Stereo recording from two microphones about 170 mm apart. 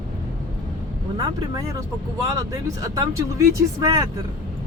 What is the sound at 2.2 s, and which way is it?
Speech, 20° right (ahead or behind).